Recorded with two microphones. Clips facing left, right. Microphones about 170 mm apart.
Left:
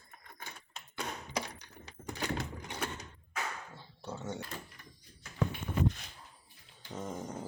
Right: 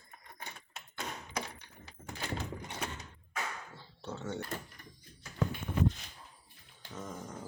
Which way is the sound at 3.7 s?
15° left (ahead or behind).